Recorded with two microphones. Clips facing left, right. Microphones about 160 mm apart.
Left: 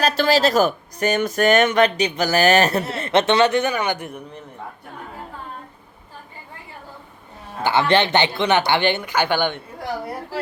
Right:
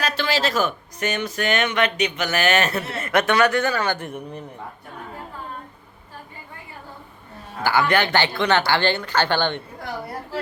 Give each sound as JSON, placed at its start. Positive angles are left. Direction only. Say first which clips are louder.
{"t": 0.0, "sound": "speech", "louder": "left 6 dB", "side_deg": 40}
{"t": 7.6, "sound": "speech", "louder": "left 2 dB", "side_deg": 25}